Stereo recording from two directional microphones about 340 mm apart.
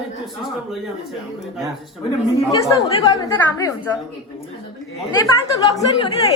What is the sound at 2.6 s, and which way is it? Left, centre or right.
A woman's voice, centre.